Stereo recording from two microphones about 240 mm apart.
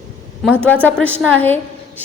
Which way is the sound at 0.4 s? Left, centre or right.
Centre.